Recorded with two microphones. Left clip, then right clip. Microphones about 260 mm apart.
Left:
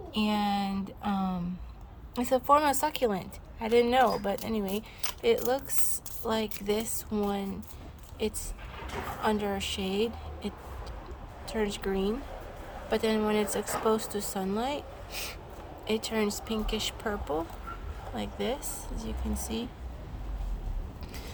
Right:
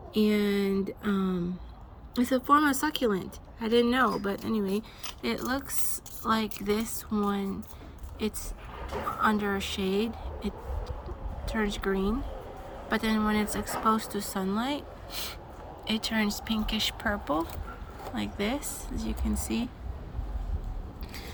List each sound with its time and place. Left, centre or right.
0.1 s a woman's voice: centre
1.0 s speech: left
2.1 s a woman's voice: centre